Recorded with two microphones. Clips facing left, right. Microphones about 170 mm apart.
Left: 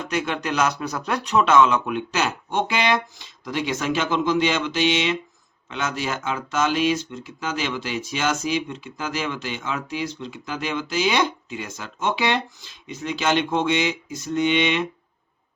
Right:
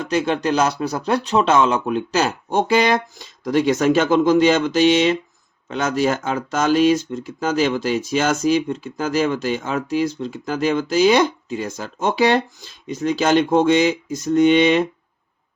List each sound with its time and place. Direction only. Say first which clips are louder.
0.1 s speech: right 7 dB; 30° right (ahead or behind)